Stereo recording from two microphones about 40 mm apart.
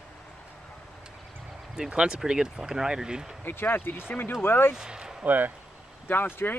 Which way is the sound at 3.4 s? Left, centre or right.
Left.